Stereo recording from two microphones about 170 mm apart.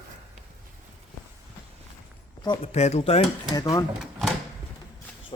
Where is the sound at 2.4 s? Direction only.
40° left (ahead or behind).